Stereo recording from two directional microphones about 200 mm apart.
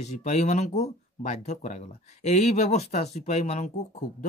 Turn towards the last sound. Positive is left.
turn(degrees=35)  # may be behind; listen again after turning